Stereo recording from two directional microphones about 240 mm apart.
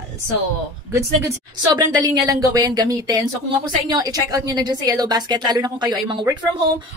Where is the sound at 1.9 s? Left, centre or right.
Centre.